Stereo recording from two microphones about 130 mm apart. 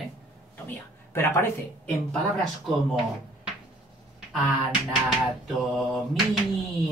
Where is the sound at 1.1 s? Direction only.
20° left (ahead or behind).